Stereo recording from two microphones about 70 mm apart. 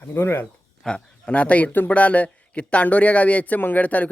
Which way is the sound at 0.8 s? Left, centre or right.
Centre.